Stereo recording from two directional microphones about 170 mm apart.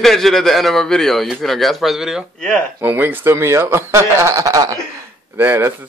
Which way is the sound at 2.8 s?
10° right (ahead or behind).